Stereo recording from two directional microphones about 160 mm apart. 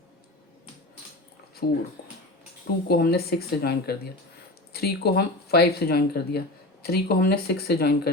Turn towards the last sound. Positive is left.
turn(degrees=75)  # may be behind; listen again after turning